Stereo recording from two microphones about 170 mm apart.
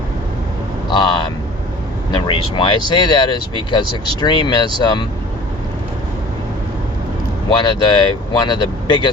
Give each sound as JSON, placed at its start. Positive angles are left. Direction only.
{"t": 0.9, "sound": "speech", "side_deg": 30}
{"t": 2.1, "sound": "speech", "side_deg": 30}
{"t": 7.5, "sound": "speech", "side_deg": 25}